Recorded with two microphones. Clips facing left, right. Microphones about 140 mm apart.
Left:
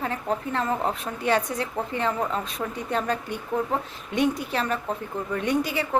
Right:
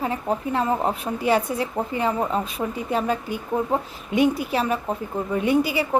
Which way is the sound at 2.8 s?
5° right (ahead or behind).